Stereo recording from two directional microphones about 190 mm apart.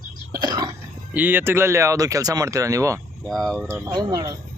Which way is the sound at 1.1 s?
10° right (ahead or behind).